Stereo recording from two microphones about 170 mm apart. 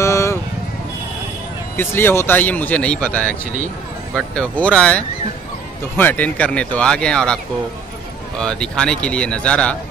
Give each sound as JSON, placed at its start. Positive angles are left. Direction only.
{"t": 0.0, "sound": "vehicle", "side_deg": 15}
{"t": 1.8, "sound": "speech", "side_deg": 15}
{"t": 8.4, "sound": "speech", "side_deg": 5}